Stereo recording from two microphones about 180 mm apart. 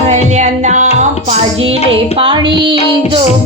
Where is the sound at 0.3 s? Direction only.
40° right (ahead or behind).